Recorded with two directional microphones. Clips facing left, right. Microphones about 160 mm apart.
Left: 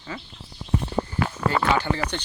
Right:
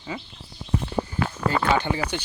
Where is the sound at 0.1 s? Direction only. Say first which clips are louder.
Right 2 dB; 15° right (ahead or behind).